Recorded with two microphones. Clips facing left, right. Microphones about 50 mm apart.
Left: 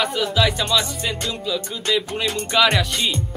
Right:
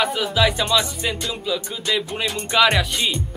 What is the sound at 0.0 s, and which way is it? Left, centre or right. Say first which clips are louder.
Music: right 1 dB; centre.